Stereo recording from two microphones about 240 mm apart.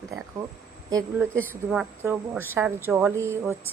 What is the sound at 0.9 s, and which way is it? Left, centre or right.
A woman's voice, centre.